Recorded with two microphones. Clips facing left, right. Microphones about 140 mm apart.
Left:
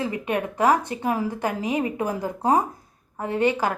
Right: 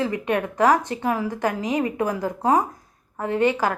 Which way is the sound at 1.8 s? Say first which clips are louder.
Right 1 dB; 25° left (ahead or behind).